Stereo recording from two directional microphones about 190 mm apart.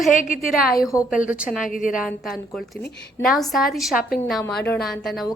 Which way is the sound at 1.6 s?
45° left (ahead or behind).